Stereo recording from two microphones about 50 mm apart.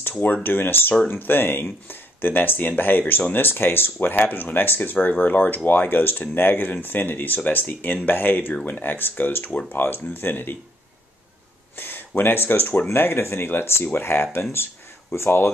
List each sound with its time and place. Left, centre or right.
0.2 s speech: left
11.7 s a sound: left
12.2 s speech: left